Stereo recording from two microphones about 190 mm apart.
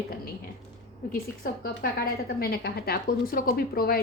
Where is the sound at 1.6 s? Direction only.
50° left (ahead or behind).